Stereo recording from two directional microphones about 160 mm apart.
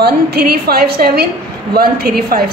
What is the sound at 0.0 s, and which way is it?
A woman's voice, 75° right (ahead or behind).